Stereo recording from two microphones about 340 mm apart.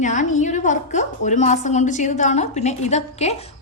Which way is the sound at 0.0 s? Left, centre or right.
Left.